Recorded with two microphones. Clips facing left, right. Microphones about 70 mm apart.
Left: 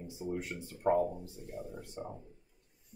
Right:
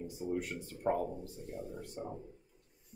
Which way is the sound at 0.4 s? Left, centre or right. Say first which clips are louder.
Even; centre.